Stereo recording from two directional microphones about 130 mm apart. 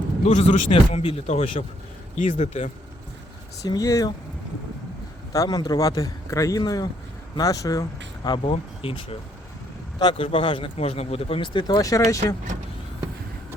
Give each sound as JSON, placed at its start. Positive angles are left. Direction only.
{"t": 0.3, "sound": "speech", "side_deg": 60}
{"t": 2.1, "sound": "speech", "side_deg": 70}
{"t": 3.6, "sound": "a man's voice", "side_deg": 25}
{"t": 5.3, "sound": "a man's voice", "side_deg": 30}
{"t": 8.4, "sound": "speech", "side_deg": 45}
{"t": 11.8, "sound": "a man's voice", "side_deg": 25}